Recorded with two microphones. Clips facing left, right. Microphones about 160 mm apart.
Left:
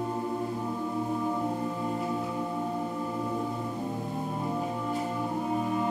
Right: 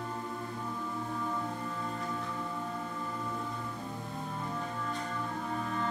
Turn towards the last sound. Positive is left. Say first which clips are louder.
# left 6 dB
turn(degrees=15)  # may be behind; listen again after turning